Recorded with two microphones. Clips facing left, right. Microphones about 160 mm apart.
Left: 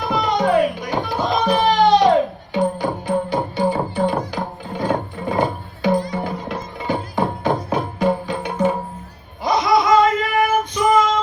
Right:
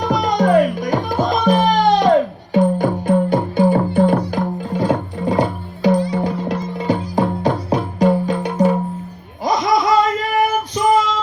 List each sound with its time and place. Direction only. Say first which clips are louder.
0.0 s music: right 2 dB; 40° right (ahead or behind)
4.8 s music: right 2 dB; 35° right (ahead or behind)
9.4 s female singing: even; 40° right (ahead or behind)